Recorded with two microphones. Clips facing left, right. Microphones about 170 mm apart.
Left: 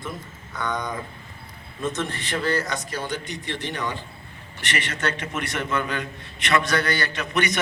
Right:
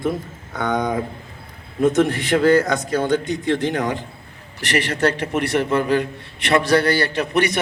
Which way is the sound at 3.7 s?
90° right.